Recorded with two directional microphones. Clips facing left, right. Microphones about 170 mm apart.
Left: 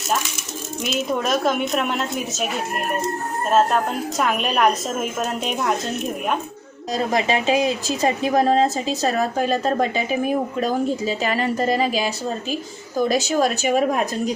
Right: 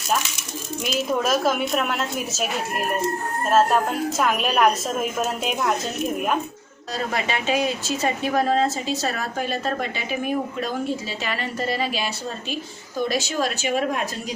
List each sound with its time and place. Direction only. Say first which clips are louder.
0.9 s a woman's voice: even; centre (ahead or behind)
4.2 s a woman's voice: left 1 dB; centre (ahead or behind)
6.9 s a woman's voice: left 5 dB; 35° left (ahead or behind)
11.2 s a woman's voice: left 6 dB; 40° left (ahead or behind)